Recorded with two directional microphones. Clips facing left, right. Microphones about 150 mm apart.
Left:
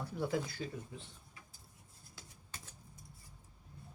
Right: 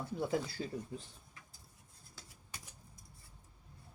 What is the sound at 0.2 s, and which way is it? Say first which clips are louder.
Speech: even; 30° right (ahead or behind).